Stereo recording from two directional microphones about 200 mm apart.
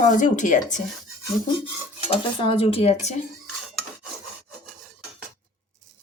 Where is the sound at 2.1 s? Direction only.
25° left (ahead or behind).